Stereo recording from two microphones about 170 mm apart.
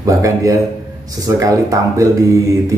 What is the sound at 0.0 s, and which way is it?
A man's voice, 20° right (ahead or behind).